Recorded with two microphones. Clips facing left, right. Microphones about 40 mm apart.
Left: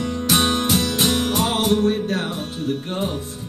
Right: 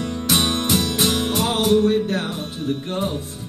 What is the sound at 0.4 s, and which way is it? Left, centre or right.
Music, left.